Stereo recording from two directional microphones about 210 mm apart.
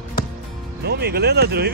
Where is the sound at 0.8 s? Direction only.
50° right (ahead or behind).